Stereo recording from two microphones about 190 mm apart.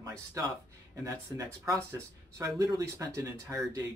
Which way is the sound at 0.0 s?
20° right (ahead or behind).